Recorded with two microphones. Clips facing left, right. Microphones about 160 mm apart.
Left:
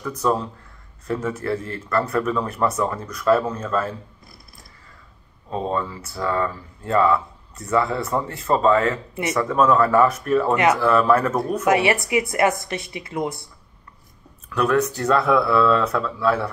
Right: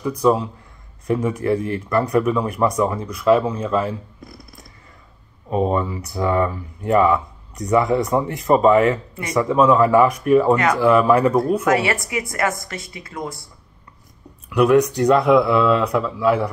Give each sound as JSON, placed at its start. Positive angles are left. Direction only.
{"t": 0.0, "sound": "speech", "side_deg": -10}
{"t": 5.5, "sound": "speech", "side_deg": -15}
{"t": 11.6, "sound": "speech", "side_deg": 25}
{"t": 14.5, "sound": "speech", "side_deg": -15}